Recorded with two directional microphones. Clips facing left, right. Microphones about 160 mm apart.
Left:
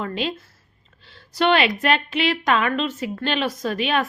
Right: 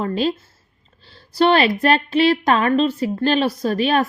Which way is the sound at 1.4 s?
35° right (ahead or behind).